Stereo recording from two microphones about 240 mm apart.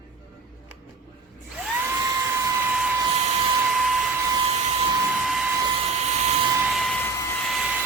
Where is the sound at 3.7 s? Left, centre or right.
Centre.